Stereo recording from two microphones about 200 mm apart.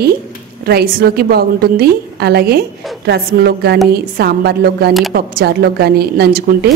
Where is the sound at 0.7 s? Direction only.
50° right (ahead or behind).